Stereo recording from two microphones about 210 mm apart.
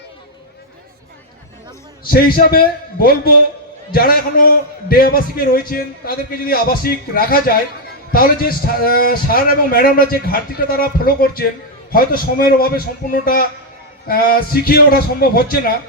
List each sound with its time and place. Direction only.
2.0 s a man's voice: 45° left (ahead or behind)